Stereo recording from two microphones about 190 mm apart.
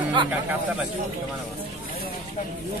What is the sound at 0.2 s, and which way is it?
Speech, 25° right (ahead or behind).